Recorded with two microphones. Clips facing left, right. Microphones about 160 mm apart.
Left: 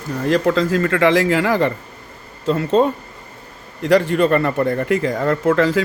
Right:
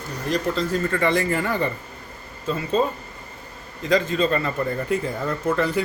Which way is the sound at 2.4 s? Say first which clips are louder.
Left 7 dB; 70° left (ahead or behind).